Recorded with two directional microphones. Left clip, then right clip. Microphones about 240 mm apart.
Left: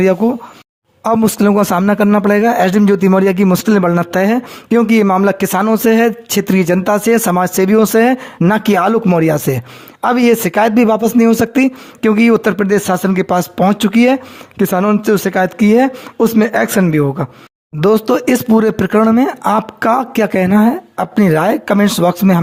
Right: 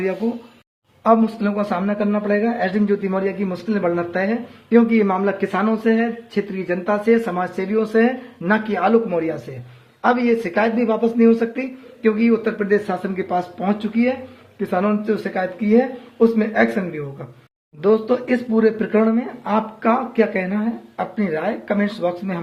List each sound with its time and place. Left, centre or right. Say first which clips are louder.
1.0 s a man's voice: left 4 dB; left